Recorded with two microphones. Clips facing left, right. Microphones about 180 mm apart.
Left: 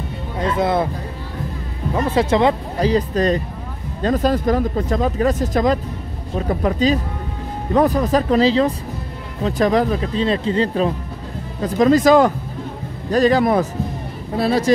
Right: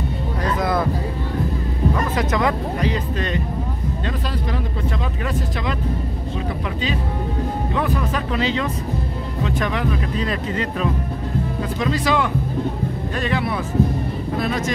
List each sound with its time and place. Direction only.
0.4 s music: 25° left (ahead or behind)
2.0 s speech: 30° left (ahead or behind)
11.6 s speech: 45° left (ahead or behind)